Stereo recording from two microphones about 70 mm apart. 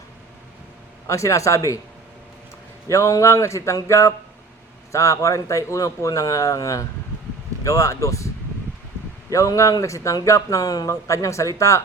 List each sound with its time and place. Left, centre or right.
1.0 s speech: left
2.9 s speech: left
9.3 s speech: left
10.8 s speech: left